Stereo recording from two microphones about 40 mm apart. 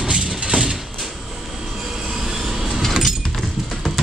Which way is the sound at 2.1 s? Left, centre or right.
Centre.